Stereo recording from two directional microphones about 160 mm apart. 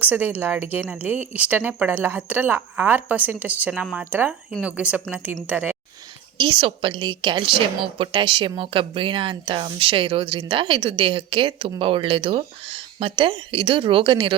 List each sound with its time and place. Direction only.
0.0 s a woman's voice: 10° right (ahead or behind)
6.3 s speech: 30° right (ahead or behind)